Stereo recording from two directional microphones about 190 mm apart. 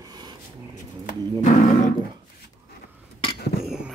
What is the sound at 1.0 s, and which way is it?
Music, 40° left (ahead or behind).